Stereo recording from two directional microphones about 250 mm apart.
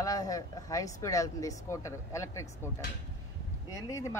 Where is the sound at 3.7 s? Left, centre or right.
Centre.